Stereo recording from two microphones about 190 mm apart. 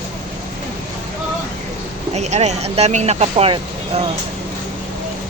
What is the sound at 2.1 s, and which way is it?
Speech, 35° right (ahead or behind).